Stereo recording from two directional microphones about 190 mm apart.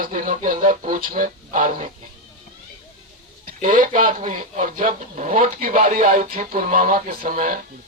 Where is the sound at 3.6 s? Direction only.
45° right (ahead or behind).